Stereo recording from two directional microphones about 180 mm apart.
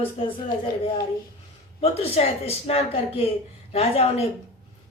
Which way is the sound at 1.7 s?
35° left (ahead or behind).